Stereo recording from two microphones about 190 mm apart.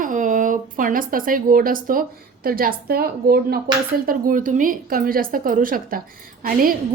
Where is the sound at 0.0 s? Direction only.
45° right (ahead or behind).